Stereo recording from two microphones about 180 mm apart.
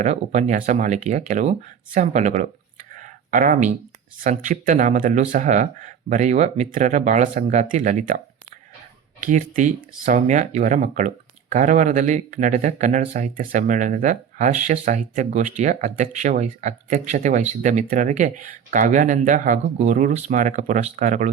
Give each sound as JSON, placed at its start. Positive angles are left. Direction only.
{"t": 0.0, "sound": "speech", "side_deg": -40}
{"t": 2.9, "sound": "a sound", "side_deg": -45}
{"t": 4.2, "sound": "speech", "side_deg": -45}
{"t": 9.2, "sound": "speech", "side_deg": -45}